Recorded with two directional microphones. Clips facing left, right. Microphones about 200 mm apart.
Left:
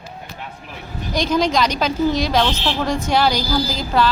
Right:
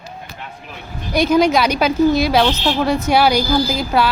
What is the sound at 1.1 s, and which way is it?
A woman's voice, 10° right (ahead or behind).